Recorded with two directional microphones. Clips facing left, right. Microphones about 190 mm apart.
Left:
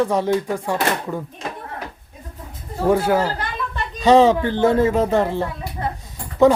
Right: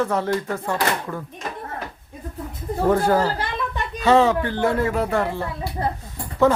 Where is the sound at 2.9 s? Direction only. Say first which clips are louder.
Left 1 dB; 10° left (ahead or behind).